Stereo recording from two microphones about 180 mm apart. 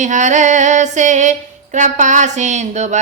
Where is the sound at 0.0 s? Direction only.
40° right (ahead or behind).